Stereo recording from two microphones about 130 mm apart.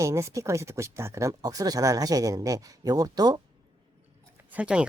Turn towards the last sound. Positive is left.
turn(degrees=-10)  # may be behind; listen again after turning